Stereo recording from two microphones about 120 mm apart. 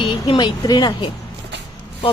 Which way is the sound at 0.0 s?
45° left (ahead or behind).